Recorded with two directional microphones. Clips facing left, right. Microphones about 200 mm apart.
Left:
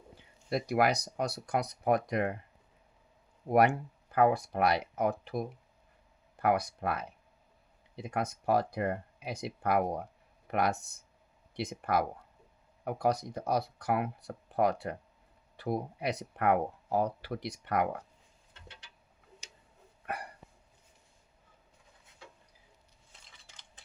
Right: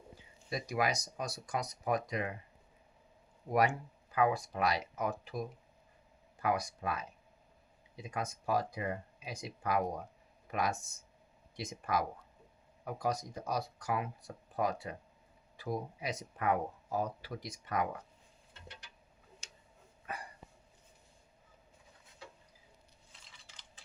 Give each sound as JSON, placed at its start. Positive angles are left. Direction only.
{"t": 0.5, "sound": "speech", "side_deg": 65}
{"t": 3.5, "sound": "speech", "side_deg": 60}
{"t": 19.4, "sound": "tick-tock", "side_deg": 15}
{"t": 20.1, "sound": "hiccup", "side_deg": 65}